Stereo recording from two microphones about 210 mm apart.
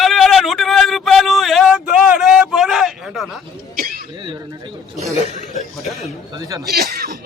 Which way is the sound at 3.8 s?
45° right (ahead or behind).